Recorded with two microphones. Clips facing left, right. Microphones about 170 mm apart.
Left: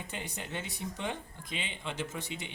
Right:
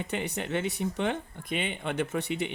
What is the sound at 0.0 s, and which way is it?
Speech, 65° right (ahead or behind).